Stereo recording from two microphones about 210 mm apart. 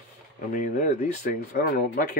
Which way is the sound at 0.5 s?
35° left (ahead or behind).